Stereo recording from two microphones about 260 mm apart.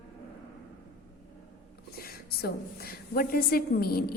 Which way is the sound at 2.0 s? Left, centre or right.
Left.